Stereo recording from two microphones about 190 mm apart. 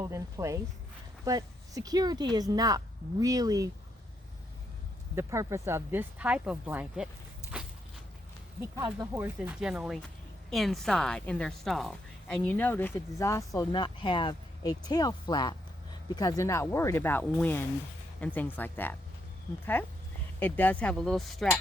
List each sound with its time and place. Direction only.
0.0 s speech: 15° right (ahead or behind)
5.1 s speech: 15° right (ahead or behind)
7.5 s walk: 5° right (ahead or behind)
8.7 s speech: 15° right (ahead or behind); by 18.9 s 10° left (ahead or behind)
20.4 s speech: 10° left (ahead or behind)